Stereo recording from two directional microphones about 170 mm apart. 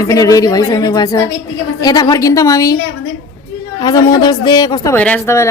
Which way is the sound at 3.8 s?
20° left (ahead or behind).